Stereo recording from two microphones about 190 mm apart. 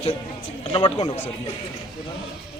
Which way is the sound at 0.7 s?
30° left (ahead or behind).